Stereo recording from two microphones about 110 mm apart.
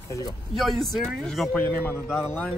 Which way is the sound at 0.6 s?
Centre (ahead or behind).